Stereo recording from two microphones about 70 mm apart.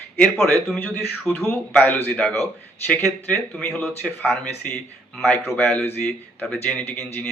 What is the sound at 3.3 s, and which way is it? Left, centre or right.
A man's voice, centre.